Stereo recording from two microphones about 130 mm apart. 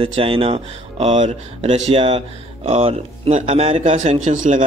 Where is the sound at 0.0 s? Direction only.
45° right (ahead or behind).